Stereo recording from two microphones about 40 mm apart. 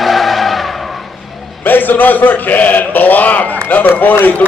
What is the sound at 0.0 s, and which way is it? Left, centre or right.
Vehicle, centre.